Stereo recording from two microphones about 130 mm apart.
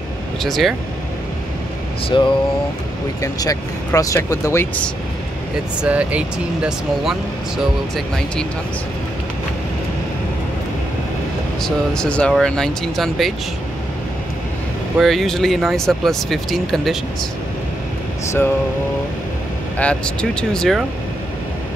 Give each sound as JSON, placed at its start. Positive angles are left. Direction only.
{"t": 0.4, "sound": "speech", "side_deg": 0}
{"t": 2.0, "sound": "speech", "side_deg": 40}
{"t": 3.2, "sound": "speech", "side_deg": 25}
{"t": 5.9, "sound": "speech", "side_deg": -10}
{"t": 11.6, "sound": "speech", "side_deg": 5}
{"t": 15.0, "sound": "speech", "side_deg": 0}
{"t": 19.8, "sound": "speech", "side_deg": 10}